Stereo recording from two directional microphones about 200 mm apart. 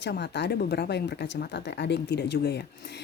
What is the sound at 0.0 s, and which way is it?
Speech, 60° left (ahead or behind).